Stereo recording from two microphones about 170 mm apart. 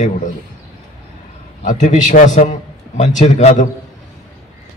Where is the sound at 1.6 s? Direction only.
45° left (ahead or behind).